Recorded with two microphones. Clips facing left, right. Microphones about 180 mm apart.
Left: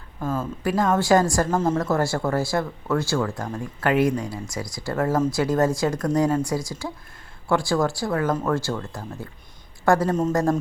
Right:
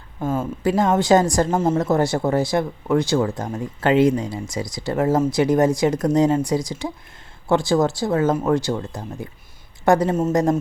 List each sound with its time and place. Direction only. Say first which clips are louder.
0.2 s a woman's voice: right 4 dB; 25° right (ahead or behind)